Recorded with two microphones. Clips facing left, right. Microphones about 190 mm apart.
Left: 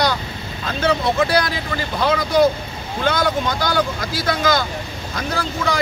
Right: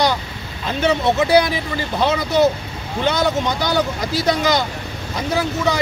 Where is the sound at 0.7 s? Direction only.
20° right (ahead or behind).